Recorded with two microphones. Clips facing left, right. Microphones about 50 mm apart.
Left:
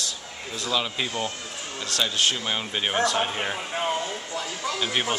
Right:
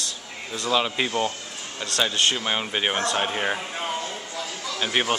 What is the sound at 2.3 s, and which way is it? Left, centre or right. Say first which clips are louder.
Speech: right 2 dB; centre.